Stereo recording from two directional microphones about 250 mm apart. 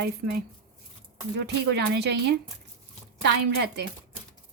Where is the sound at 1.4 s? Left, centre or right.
Right.